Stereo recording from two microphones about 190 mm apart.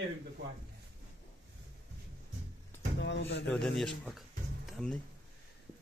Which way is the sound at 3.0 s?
70° left (ahead or behind).